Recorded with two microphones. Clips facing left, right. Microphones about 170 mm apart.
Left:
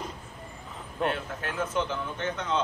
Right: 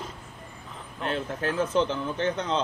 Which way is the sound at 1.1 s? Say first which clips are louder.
Right 4 dB; 30° right (ahead or behind).